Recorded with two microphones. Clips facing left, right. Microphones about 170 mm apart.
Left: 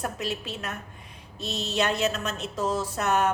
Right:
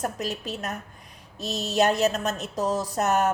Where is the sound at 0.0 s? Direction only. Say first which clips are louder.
Right 2 dB; 40° right (ahead or behind).